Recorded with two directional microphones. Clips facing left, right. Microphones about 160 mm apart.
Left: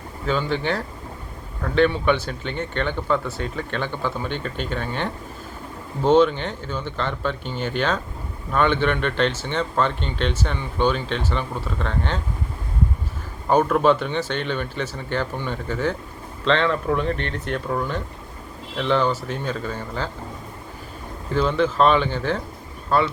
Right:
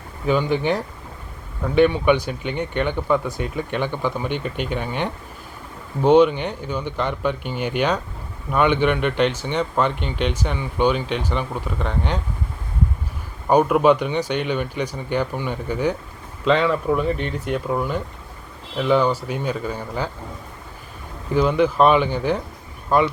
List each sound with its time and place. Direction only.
0.3 s speech: 15° right (ahead or behind)
13.5 s speech: 10° right (ahead or behind)
21.3 s speech: 15° right (ahead or behind)